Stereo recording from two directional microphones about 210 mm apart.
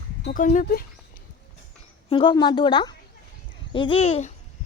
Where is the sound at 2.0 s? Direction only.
20° left (ahead or behind).